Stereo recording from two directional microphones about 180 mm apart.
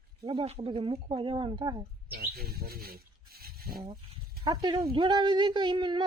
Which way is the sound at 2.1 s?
60° right (ahead or behind).